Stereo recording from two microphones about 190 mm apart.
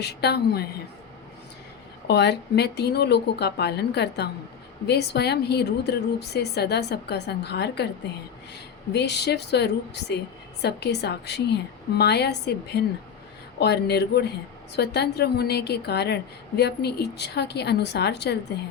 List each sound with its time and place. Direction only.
0.0 s a woman's voice: 60° left (ahead or behind)
2.0 s a woman's voice: 60° left (ahead or behind)
8.9 s a woman's voice: 60° left (ahead or behind)